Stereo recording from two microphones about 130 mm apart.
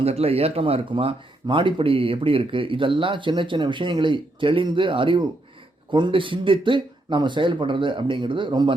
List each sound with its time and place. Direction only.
0.0 s speech: 50° right (ahead or behind)